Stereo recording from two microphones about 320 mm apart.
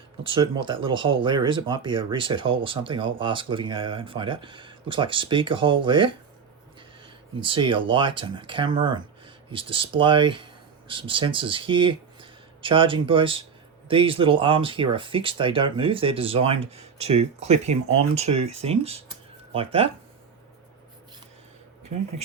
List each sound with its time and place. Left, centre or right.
0.3 s speech: centre
7.3 s speech: centre